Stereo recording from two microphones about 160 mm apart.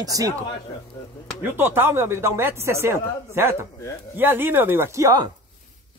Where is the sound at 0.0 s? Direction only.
20° right (ahead or behind).